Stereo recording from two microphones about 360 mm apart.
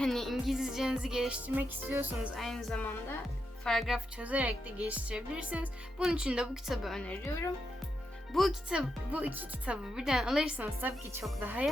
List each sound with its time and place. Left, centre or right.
0.0 s speech: centre